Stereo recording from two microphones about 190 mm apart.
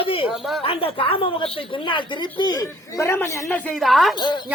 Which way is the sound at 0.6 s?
30° left (ahead or behind).